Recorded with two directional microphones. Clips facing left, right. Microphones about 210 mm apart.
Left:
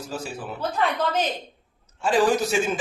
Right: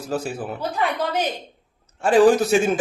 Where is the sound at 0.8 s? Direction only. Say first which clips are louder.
Even; 10° right (ahead or behind).